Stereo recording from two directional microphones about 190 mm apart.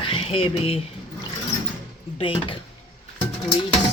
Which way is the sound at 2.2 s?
25° left (ahead or behind).